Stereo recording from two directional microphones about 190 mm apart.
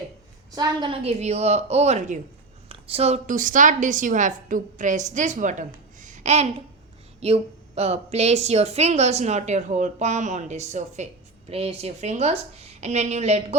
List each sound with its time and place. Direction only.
0.5 s a woman's voice: 20° right (ahead or behind)